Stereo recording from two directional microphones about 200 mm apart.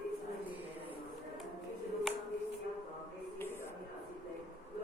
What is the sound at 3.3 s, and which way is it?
Music, 10° left (ahead or behind).